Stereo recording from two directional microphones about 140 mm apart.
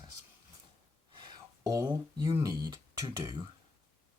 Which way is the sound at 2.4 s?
25° right (ahead or behind).